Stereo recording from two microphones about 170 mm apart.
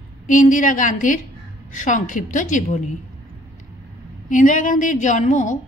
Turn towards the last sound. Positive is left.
turn(degrees=45)  # may be behind; listen again after turning